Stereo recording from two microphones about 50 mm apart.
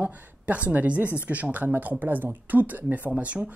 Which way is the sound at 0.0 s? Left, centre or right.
Right.